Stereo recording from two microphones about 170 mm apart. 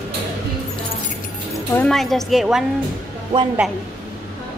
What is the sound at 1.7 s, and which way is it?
Speech, 5° left (ahead or behind).